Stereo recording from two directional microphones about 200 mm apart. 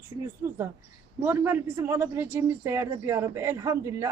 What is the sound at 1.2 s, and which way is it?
A man's voice, 10° right (ahead or behind).